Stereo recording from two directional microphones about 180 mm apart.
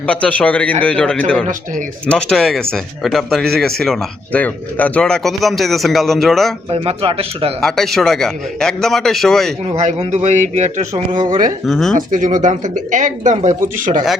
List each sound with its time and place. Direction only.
0.0 s a man's voice: 5° left (ahead or behind)
6.7 s a man's voice: 30° right (ahead or behind)
7.6 s speech: centre (ahead or behind)
9.7 s a man's voice: 40° right (ahead or behind)
11.3 s speech: 20° right (ahead or behind)
11.6 s speech: centre (ahead or behind)
11.9 s speech: 45° right (ahead or behind)